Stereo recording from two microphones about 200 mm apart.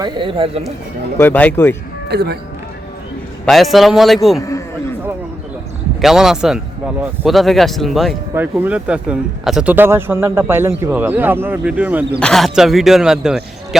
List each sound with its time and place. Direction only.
0.0 s speech: 25° right (ahead or behind)
1.2 s speech: 10° left (ahead or behind)
2.0 s speech: 55° right (ahead or behind)
3.4 s speech: centre (ahead or behind)
6.0 s speech: centre (ahead or behind)